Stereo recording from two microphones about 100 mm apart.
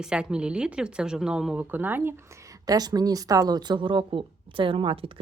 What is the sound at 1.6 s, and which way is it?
A woman's voice, 20° right (ahead or behind).